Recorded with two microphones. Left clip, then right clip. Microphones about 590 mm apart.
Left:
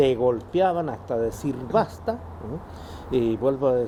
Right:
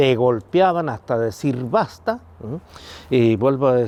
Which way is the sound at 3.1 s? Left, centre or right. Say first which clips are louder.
Right 6 dB; right.